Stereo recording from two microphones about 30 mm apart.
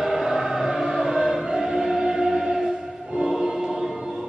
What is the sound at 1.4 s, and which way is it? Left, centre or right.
Music, centre.